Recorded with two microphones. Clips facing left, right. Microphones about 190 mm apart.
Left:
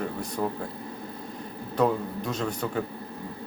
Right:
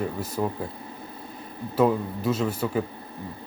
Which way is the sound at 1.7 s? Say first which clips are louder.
Right 3 dB; 5° right (ahead or behind).